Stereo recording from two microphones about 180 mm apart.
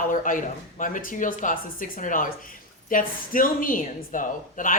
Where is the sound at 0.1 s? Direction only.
45° left (ahead or behind).